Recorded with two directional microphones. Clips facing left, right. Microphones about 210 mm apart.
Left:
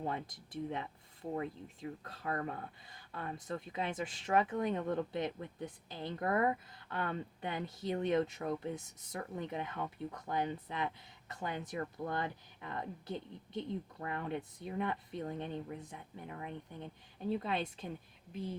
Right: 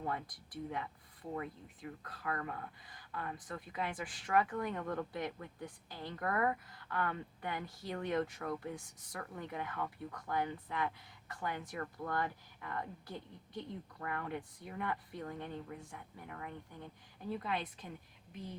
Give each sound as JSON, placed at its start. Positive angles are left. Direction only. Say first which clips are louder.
{"t": 0.0, "sound": "speech", "louder": "left 1 dB", "side_deg": 25}